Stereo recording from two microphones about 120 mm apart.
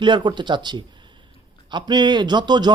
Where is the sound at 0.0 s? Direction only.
40° right (ahead or behind).